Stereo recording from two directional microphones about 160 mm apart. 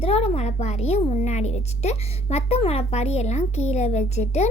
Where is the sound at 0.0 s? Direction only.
40° left (ahead or behind).